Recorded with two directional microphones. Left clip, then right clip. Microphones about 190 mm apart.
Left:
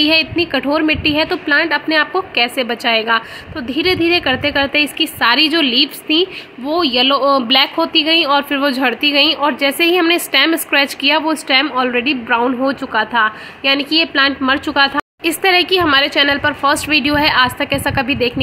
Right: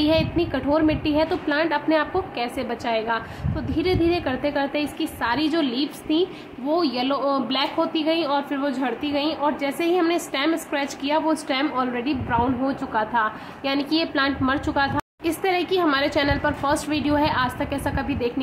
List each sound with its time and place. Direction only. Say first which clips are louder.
0.0 s a woman's voice: left 7 dB; 15° left (ahead or behind)